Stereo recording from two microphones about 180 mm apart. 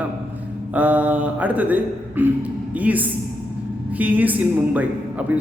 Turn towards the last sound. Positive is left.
turn(degrees=-10)  # may be behind; listen again after turning